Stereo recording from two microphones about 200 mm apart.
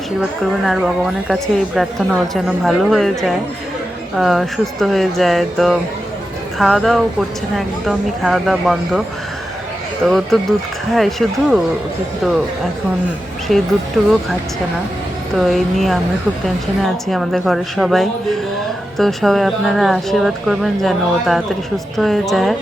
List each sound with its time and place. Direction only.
0.2 s a woman's voice: centre (ahead or behind)
13.5 s a woman's voice: centre (ahead or behind)
15.4 s a woman's voice: centre (ahead or behind)